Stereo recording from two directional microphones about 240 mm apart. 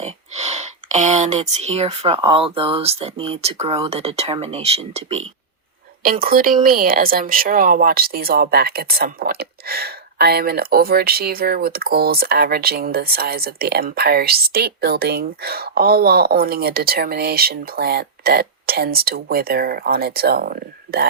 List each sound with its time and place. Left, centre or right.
0.0 s speech: right
6.0 s speech: right